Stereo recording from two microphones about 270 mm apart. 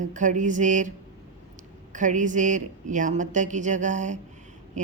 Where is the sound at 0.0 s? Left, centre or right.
Right.